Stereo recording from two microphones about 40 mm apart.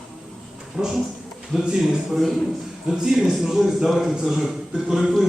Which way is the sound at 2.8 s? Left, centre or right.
Centre.